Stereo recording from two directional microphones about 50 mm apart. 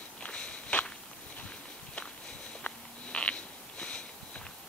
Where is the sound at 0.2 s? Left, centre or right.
Left.